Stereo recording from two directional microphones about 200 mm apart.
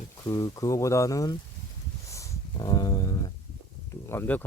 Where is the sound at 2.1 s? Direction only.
15° left (ahead or behind).